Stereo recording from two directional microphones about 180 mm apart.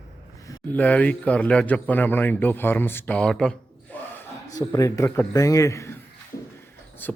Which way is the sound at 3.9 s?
10° left (ahead or behind).